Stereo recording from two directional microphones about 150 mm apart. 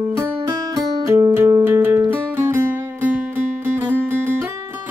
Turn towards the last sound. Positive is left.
turn(degrees=-15)  # may be behind; listen again after turning